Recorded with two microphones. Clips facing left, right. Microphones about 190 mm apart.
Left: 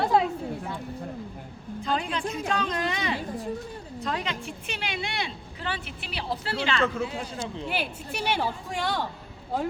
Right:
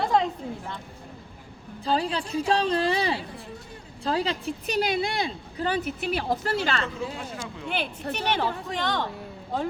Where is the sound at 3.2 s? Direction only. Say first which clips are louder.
Left 5 dB; 45° left (ahead or behind).